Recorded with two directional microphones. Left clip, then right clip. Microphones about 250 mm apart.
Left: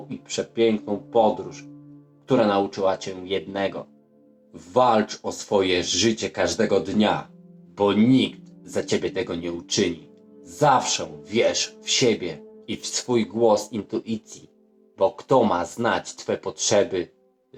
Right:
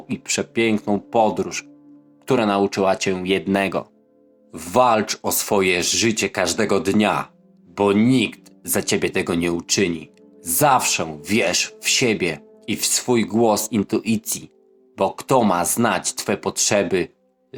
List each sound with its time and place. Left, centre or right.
0.3 s speech: right